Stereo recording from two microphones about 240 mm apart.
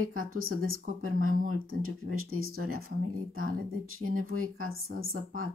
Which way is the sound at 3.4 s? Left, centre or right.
Right.